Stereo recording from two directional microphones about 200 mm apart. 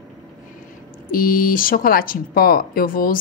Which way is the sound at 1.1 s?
45° left (ahead or behind).